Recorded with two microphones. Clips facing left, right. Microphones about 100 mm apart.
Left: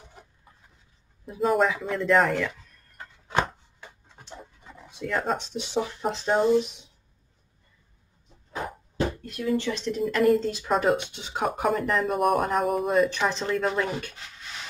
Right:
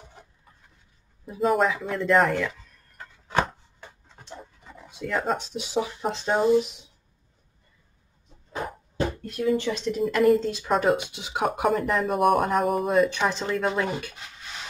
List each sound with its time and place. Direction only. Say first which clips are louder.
1.2 s speech: even; centre (ahead or behind)
4.2 s speech: right 2 dB; centre (ahead or behind)
9.6 s speech: right 1 dB; 15° right (ahead or behind)
9.9 s speech: right 1 dB; centre (ahead or behind)